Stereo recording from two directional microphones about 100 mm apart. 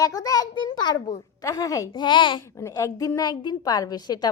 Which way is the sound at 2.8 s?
35° left (ahead or behind).